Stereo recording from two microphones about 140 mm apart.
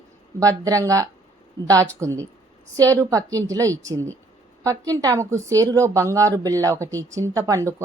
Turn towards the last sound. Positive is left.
turn(degrees=-25)  # may be behind; listen again after turning